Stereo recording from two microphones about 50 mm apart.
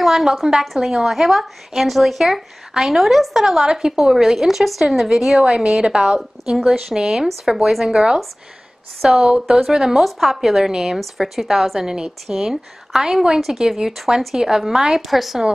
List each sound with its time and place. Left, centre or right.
0.0 s a woman's voice: centre